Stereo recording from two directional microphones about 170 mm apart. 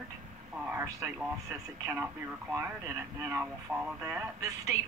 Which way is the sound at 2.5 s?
15° right (ahead or behind).